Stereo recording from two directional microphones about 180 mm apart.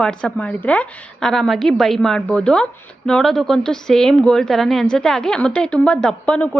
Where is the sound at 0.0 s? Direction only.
5° left (ahead or behind).